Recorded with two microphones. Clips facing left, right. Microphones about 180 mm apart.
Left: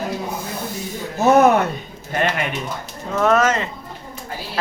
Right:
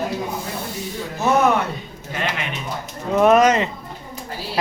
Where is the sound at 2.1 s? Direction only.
50° left (ahead or behind).